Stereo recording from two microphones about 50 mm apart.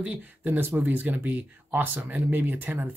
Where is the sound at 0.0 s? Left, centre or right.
Right.